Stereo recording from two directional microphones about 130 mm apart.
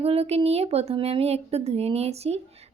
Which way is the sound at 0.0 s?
50° right (ahead or behind).